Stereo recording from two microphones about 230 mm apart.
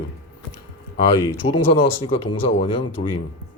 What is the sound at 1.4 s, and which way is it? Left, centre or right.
A man's voice, left.